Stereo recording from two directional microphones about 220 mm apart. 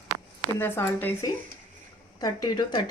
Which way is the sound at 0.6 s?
10° left (ahead or behind).